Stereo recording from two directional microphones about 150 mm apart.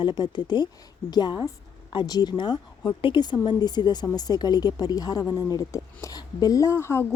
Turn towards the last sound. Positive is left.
turn(degrees=15)  # may be behind; listen again after turning